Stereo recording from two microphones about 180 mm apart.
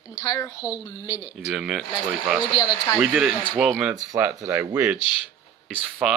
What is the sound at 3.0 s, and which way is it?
Speech, 5° right (ahead or behind).